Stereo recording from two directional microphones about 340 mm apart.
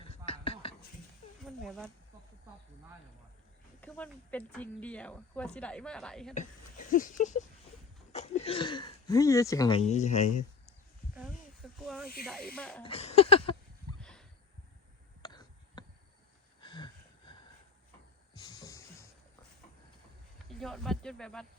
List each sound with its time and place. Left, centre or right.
0.3 s a sound: centre
1.5 s speech: centre
3.8 s speech: centre
6.9 s speech: left
11.6 s snake: centre
12.2 s speech: centre
12.8 s speech: centre
14.0 s a sound: centre
15.2 s throat clearing: centre
16.6 s a sound: centre
18.3 s a sound: centre
20.5 s speech: centre